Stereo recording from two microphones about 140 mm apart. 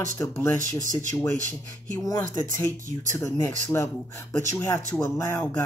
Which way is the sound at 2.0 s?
25° left (ahead or behind).